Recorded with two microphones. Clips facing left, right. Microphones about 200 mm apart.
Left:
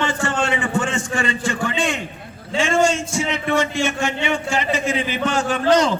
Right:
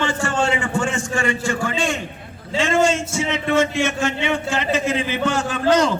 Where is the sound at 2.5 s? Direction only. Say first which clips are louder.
Even; 15° left (ahead or behind).